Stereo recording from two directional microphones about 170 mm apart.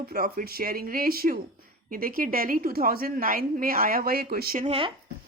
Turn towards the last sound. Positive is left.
turn(degrees=-30)  # may be behind; listen again after turning